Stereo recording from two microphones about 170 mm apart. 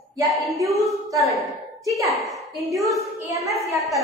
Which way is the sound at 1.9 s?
20° right (ahead or behind).